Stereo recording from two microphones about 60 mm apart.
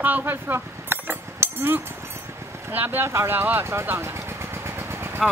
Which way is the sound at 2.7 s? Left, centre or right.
Right.